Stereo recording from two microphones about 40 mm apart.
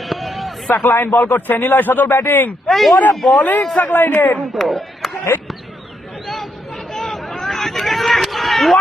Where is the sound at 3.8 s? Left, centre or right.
Left.